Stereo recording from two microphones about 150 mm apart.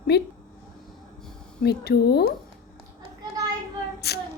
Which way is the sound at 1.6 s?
90° left.